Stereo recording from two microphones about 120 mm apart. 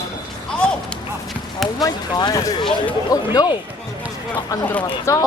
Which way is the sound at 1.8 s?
35° left (ahead or behind).